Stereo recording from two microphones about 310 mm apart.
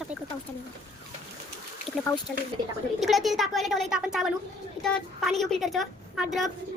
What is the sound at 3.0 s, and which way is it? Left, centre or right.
Speech, centre.